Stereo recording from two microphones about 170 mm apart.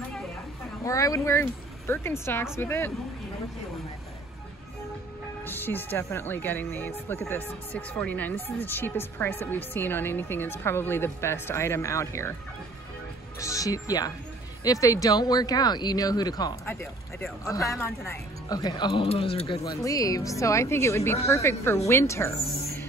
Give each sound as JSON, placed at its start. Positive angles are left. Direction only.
{"t": 0.8, "sound": "speech", "side_deg": 20}
{"t": 5.4, "sound": "speech", "side_deg": 10}
{"t": 13.4, "sound": "speech", "side_deg": 20}